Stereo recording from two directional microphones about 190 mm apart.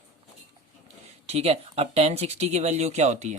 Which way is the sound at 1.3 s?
35° right (ahead or behind).